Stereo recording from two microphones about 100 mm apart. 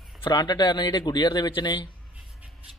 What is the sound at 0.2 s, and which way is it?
Speech, 45° left (ahead or behind).